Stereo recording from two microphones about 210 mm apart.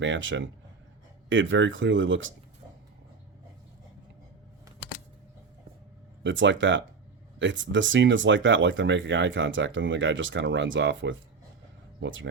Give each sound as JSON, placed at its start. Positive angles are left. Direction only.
{"t": 0.0, "sound": "speech", "side_deg": -60}
{"t": 6.2, "sound": "speech", "side_deg": -60}